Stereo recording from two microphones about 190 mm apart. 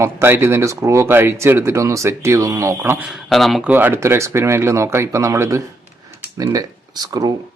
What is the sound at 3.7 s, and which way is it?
Speech, 10° right (ahead or behind).